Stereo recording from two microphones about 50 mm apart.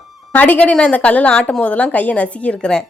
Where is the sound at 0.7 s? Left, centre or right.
Left.